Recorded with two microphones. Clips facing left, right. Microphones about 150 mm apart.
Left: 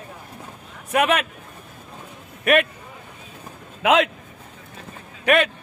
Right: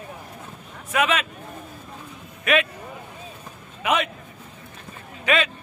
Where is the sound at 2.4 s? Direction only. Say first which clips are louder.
Left 3 dB; 60° left (ahead or behind).